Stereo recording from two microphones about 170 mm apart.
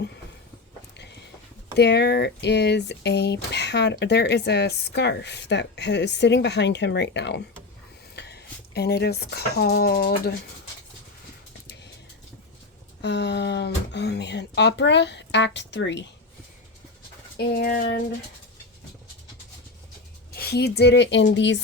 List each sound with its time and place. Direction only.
0.9 s a sound: 85° left
1.7 s speech: 85° left
8.1 s speech: 75° left (ahead or behind)
13.0 s speech: 85° left
17.3 s a sound: 60° left (ahead or behind)
20.3 s speech: 70° left (ahead or behind); by 21.6 s 90° left